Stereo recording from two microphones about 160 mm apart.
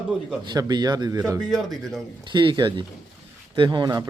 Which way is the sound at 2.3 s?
30° right (ahead or behind).